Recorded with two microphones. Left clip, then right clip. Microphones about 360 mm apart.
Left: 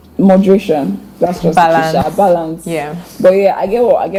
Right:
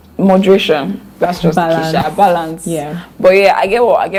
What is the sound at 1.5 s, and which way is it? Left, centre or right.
Speech, left.